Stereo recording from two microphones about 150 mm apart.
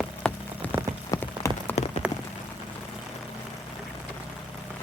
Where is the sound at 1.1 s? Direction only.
20° left (ahead or behind).